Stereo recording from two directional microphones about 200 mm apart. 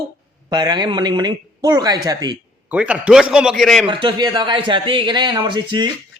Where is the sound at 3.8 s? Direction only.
25° right (ahead or behind).